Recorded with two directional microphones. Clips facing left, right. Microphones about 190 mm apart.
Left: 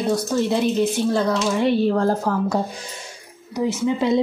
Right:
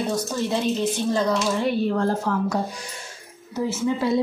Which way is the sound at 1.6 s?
30° left (ahead or behind).